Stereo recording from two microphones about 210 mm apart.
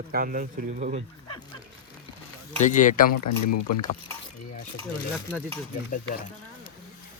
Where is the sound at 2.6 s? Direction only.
35° left (ahead or behind).